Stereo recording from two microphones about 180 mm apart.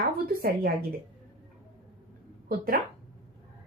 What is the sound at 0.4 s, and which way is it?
Speech, 55° right (ahead or behind).